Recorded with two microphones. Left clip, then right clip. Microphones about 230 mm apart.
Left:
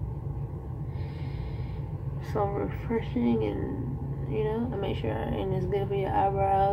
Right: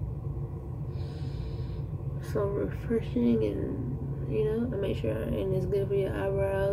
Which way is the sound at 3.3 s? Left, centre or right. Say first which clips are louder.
Even; left.